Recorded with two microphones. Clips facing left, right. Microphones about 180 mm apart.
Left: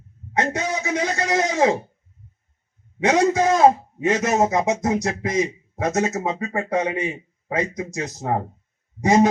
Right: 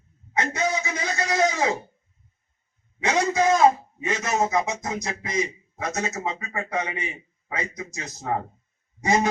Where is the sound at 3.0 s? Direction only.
45° left (ahead or behind).